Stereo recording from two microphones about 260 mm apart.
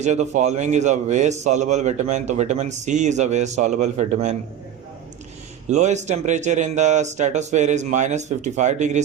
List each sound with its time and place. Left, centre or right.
0.0 s a man's voice: right
5.7 s a man's voice: right